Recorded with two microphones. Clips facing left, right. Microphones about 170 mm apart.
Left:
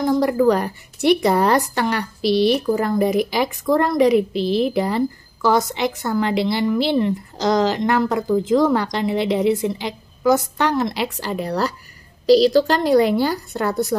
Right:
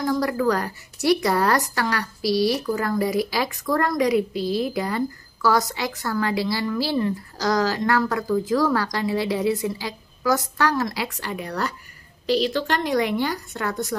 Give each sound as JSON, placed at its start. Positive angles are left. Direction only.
{"t": 0.0, "sound": "a woman's voice", "side_deg": 25}